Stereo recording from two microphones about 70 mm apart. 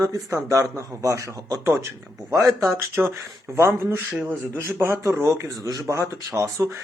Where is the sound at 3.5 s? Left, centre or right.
Right.